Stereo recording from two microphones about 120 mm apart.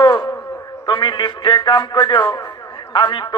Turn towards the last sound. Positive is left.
turn(degrees=40)  # may be behind; listen again after turning